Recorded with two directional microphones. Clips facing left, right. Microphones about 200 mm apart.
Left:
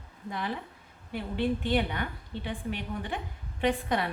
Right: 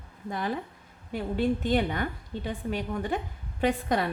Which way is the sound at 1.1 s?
45° right (ahead or behind).